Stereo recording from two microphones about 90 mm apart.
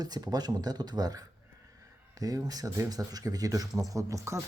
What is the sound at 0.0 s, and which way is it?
Speech, 50° right (ahead or behind).